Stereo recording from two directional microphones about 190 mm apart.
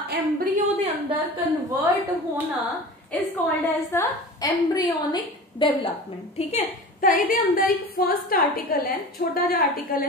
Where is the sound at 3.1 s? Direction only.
5° left (ahead or behind); by 5.9 s 25° left (ahead or behind).